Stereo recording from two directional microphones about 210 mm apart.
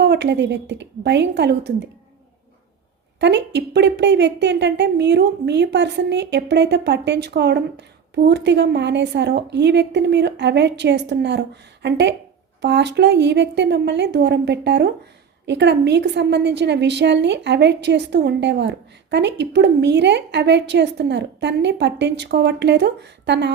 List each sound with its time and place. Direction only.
0.0 s a woman's voice: 55° right (ahead or behind)
3.2 s a woman's voice: 55° right (ahead or behind)